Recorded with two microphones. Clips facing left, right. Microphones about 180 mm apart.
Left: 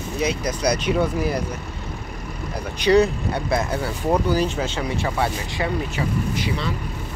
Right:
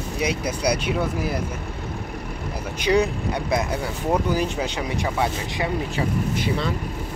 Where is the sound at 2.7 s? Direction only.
10° right (ahead or behind).